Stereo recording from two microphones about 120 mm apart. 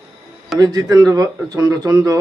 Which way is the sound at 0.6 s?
30° right (ahead or behind).